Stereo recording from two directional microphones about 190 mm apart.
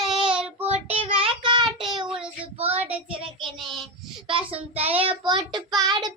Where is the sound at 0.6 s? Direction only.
30° right (ahead or behind).